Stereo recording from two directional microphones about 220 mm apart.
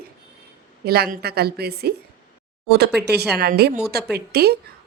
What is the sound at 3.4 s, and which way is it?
A woman's voice, 45° right (ahead or behind).